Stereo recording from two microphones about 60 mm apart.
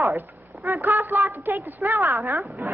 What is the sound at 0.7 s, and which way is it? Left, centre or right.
A woman's voice, right.